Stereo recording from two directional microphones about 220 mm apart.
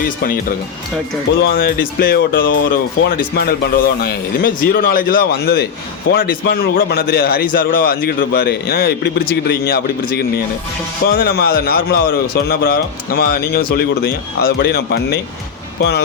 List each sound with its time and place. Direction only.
1.4 s speech: 45° left (ahead or behind)
2.5 s speech: 55° left (ahead or behind)